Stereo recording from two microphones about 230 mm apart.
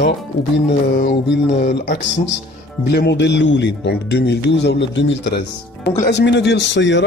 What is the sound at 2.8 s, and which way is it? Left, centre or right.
A man's voice, left.